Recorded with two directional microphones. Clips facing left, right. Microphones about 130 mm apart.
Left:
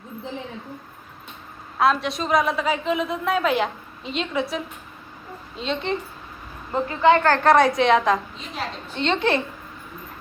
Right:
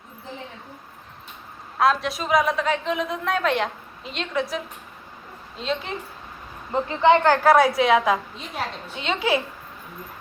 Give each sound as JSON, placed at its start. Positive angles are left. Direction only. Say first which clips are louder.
{"t": 1.8, "sound": "a man's voice", "louder": "even", "side_deg": 0}
{"t": 6.7, "sound": "a woman's voice", "louder": "even", "side_deg": -20}